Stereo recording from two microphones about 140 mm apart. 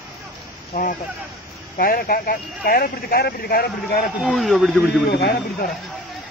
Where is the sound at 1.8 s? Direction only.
90° left.